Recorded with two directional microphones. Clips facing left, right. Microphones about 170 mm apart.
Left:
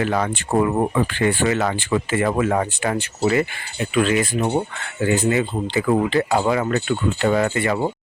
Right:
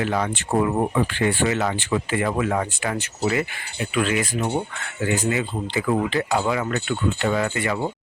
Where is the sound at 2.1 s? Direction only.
45° left (ahead or behind).